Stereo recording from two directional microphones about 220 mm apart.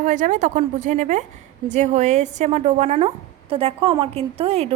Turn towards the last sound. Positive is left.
turn(degrees=-25)  # may be behind; listen again after turning